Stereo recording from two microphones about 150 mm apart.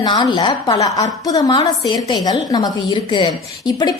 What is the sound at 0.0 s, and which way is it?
A woman's voice, 30° left (ahead or behind).